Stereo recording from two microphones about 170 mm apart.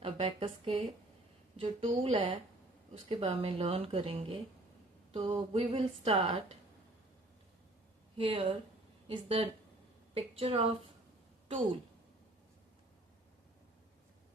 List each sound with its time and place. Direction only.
0.0 s a woman's voice: 35° right (ahead or behind)
8.2 s speech: 35° right (ahead or behind)